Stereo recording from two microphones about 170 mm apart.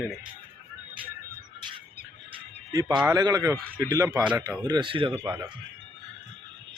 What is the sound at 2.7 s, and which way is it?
A man's voice, 20° right (ahead or behind).